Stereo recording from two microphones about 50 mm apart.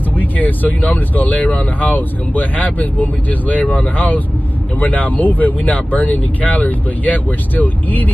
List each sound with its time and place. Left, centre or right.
0.2 s speech: left